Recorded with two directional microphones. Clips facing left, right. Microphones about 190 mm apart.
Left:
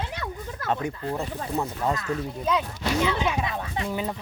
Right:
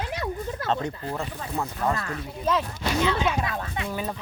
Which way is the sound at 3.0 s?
15° left (ahead or behind).